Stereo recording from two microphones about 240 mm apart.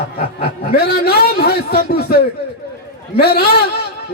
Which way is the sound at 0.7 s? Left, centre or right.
Left.